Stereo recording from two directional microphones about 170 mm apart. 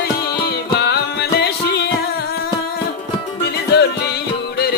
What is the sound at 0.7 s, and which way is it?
Music, 70° left (ahead or behind).